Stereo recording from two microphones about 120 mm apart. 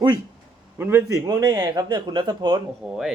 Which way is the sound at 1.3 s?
30° right (ahead or behind).